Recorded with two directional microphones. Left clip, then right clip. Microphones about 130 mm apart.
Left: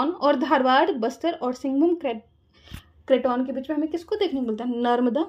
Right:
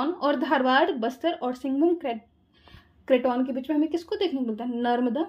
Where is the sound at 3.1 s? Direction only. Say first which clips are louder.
Left 1 dB; centre (ahead or behind).